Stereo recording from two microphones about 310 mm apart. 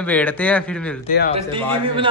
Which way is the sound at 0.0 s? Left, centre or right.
Centre.